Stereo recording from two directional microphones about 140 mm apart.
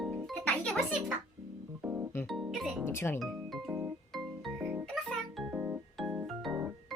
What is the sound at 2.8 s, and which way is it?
Music, 15° left (ahead or behind).